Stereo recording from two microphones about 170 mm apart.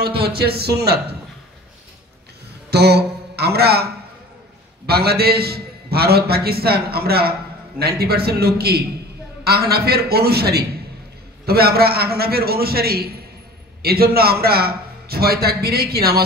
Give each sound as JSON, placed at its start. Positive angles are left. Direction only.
{"t": 0.0, "sound": "a man's voice", "side_deg": -65}
{"t": 2.7, "sound": "a sound", "side_deg": -75}
{"t": 4.8, "sound": "a man's voice", "side_deg": -65}